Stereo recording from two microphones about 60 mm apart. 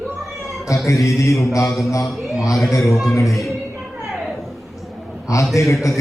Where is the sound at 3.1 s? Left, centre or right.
Left.